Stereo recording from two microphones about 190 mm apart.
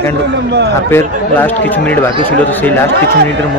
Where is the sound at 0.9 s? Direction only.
10° left (ahead or behind).